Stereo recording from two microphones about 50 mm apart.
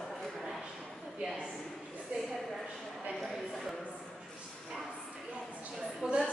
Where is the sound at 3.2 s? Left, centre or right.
Centre.